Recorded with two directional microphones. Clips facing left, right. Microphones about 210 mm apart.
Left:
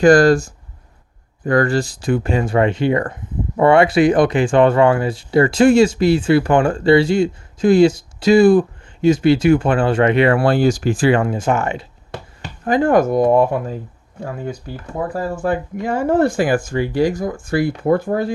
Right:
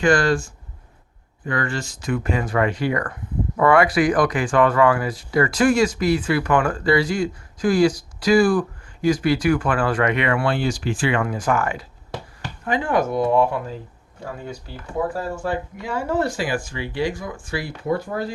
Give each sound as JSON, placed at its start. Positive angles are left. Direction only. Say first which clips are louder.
{"t": 0.0, "sound": "speech", "louder": "left 8 dB", "side_deg": 40}
{"t": 12.6, "sound": "speech", "louder": "left 7 dB", "side_deg": 40}
{"t": 15.1, "sound": "speech", "louder": "left 5 dB", "side_deg": 50}